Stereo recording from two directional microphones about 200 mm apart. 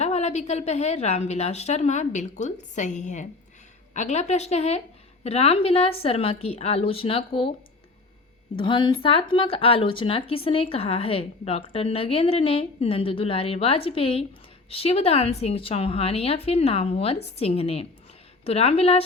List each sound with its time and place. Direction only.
0.0 s a woman's voice: 35° left (ahead or behind)
8.5 s a woman's voice: 25° left (ahead or behind)